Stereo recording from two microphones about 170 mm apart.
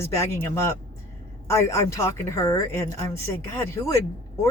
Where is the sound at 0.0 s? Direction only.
15° left (ahead or behind).